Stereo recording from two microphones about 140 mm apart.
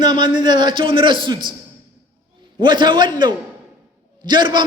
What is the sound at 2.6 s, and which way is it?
A man's voice, 35° right (ahead or behind).